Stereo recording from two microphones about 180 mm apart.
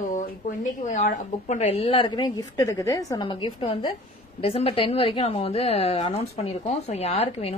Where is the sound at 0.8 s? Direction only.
45° left (ahead or behind).